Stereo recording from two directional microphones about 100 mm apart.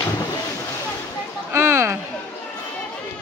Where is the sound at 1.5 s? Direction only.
25° right (ahead or behind).